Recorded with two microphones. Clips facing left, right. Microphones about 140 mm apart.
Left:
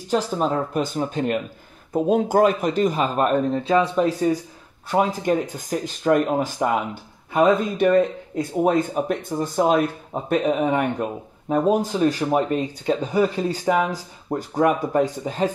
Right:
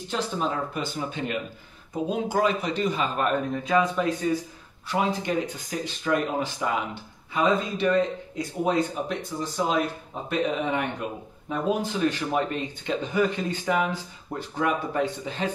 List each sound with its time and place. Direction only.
0.1 s speech: 45° left (ahead or behind)